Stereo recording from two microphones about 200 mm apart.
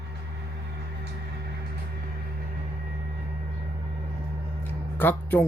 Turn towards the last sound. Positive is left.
turn(degrees=10)  # may be behind; listen again after turning